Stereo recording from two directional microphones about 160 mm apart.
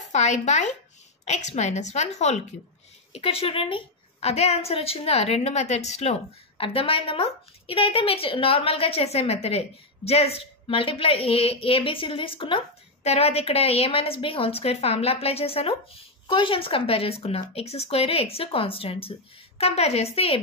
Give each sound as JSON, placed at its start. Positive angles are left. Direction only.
{"t": 0.1, "sound": "a woman's voice", "side_deg": 45}